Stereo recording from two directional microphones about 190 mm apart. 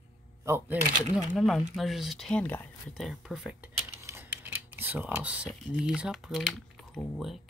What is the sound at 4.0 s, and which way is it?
Speech, 10° right (ahead or behind).